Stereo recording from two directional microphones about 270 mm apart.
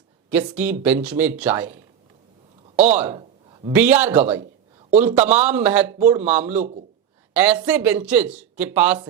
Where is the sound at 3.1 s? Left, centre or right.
Centre.